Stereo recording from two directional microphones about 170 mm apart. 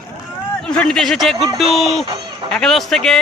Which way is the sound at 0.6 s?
5° left (ahead or behind).